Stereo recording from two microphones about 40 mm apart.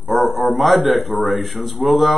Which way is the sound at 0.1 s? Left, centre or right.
Centre.